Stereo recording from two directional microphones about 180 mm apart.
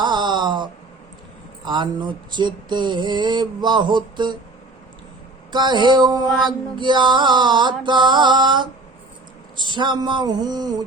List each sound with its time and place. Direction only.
0.0 s a sound: 25° right (ahead or behind)
1.6 s music: 25° right (ahead or behind)
5.5 s music: 25° right (ahead or behind)